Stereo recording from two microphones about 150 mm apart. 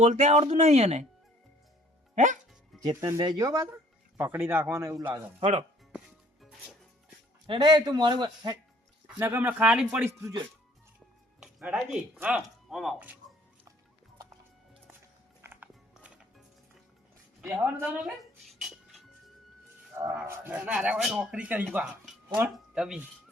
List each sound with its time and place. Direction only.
0.0 s speech: 50° right (ahead or behind)
2.1 s speech: 55° right (ahead or behind)
2.9 s speech: 20° right (ahead or behind)
4.2 s speech: 15° right (ahead or behind)
5.4 s speech: 45° right (ahead or behind)
6.4 s music: centre (ahead or behind)
7.4 s a man's voice: 35° right (ahead or behind)
9.1 s speech: 15° right (ahead or behind)
11.3 s speech: 5° right (ahead or behind)
15.4 s music: 15° right (ahead or behind)
17.4 s music: 10° right (ahead or behind)
20.2 s speech: 10° right (ahead or behind)